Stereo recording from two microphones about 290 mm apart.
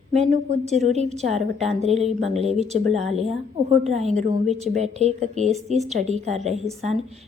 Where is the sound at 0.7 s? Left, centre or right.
Right.